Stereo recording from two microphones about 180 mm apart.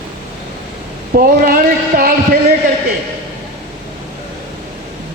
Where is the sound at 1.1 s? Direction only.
55° right (ahead or behind).